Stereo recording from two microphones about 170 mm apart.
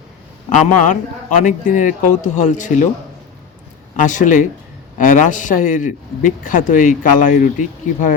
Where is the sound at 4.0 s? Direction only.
50° left (ahead or behind).